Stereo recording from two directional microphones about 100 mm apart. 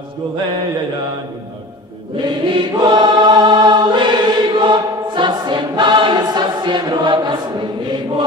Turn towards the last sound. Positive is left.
turn(degrees=-50)  # may be behind; listen again after turning